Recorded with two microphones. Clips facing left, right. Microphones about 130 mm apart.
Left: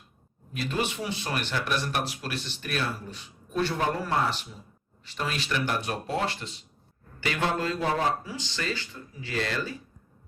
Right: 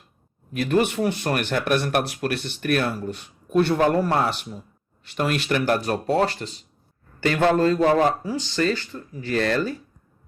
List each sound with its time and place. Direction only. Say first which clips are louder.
0.5 s speech: right 9 dB; 55° right (ahead or behind)
6.1 s speech: right 10 dB; 35° right (ahead or behind)
7.3 s a man's voice: right 9 dB; 50° right (ahead or behind)